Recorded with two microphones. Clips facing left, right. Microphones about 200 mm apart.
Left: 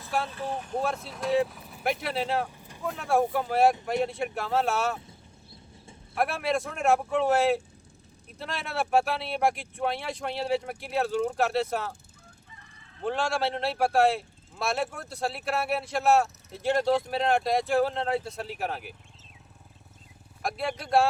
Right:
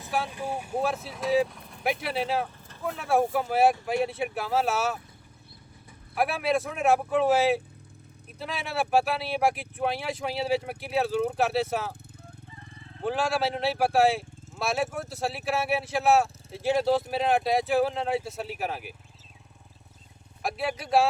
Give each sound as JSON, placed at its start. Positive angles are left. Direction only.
{"t": 0.3, "sound": "speech", "side_deg": -10}
{"t": 6.1, "sound": "speech", "side_deg": 0}
{"t": 13.0, "sound": "speech", "side_deg": 0}
{"t": 20.4, "sound": "speech", "side_deg": -5}